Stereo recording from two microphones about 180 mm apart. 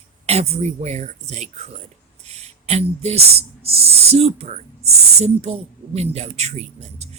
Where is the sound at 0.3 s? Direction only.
35° right (ahead or behind).